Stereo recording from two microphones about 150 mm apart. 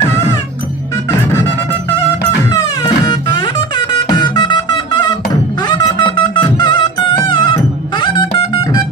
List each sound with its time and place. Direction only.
2.5 s music: 25° left (ahead or behind)